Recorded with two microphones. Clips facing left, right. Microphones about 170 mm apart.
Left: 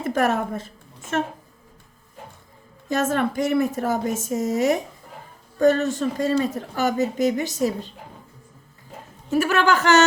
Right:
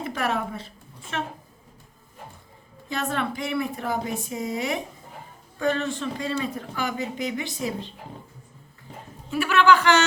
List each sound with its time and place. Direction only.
0.0 s a woman's voice: 45° left (ahead or behind)
2.9 s speech: 45° left (ahead or behind)
9.3 s speech: 45° left (ahead or behind)